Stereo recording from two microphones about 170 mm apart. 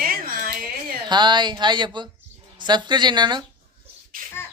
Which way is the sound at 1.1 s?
25° right (ahead or behind).